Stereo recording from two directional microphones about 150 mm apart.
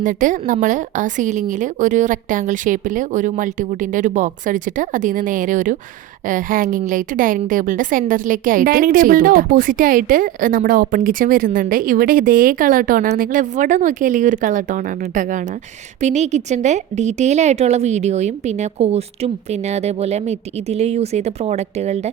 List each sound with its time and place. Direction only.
0.0 s a woman's voice: 60° right (ahead or behind)